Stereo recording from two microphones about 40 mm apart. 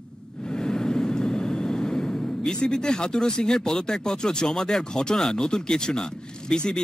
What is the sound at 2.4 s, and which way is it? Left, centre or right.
Speech, centre.